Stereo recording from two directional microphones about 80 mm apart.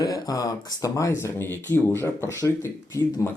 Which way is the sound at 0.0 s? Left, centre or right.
Left.